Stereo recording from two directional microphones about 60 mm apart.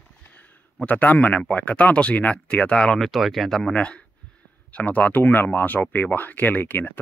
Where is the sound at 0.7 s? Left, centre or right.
Left.